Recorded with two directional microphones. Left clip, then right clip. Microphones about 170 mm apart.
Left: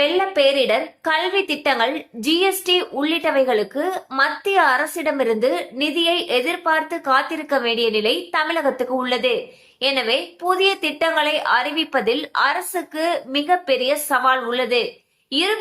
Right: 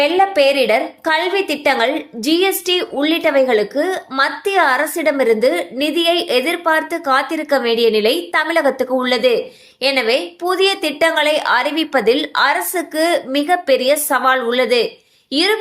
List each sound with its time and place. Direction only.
0.0 s a woman's voice: 20° right (ahead or behind)